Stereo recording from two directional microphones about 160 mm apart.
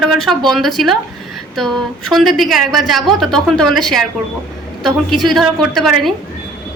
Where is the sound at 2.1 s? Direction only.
Centre (ahead or behind).